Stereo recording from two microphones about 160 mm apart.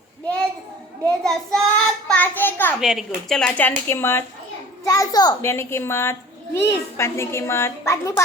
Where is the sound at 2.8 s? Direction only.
Centre (ahead or behind).